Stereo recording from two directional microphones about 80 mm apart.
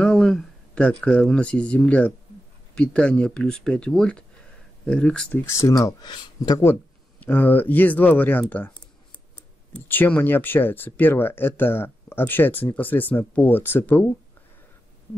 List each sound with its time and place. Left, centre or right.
0.0 s speech: centre
5.4 s speech: left
5.9 s speech: left
7.2 s speech: left
9.8 s speech: left